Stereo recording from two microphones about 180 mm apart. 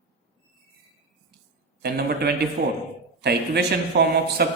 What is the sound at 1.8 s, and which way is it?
A man's voice, 65° right (ahead or behind).